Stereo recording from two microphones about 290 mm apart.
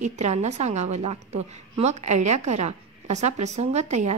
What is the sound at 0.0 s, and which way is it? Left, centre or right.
A woman's voice, right.